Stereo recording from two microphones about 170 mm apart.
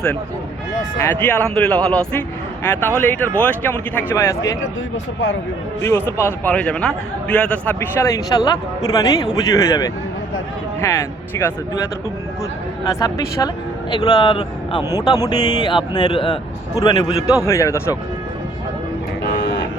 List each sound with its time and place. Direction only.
1.1 s a man's voice: 10° left (ahead or behind)
5.8 s a man's voice: 15° left (ahead or behind)
12.9 s speech: 20° left (ahead or behind)
17.2 s a man's voice: 20° left (ahead or behind)